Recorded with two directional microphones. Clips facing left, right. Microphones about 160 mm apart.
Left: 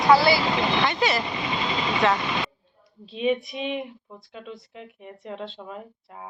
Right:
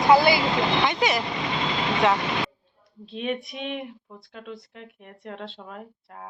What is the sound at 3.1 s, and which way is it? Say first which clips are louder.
Speech: left 5 dB; centre (ahead or behind).